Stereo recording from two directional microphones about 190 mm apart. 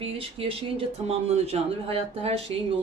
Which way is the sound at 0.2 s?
30° right (ahead or behind).